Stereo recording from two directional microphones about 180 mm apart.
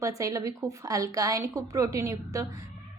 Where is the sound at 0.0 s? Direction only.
20° right (ahead or behind).